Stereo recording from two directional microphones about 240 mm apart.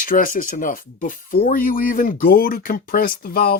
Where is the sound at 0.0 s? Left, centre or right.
Left.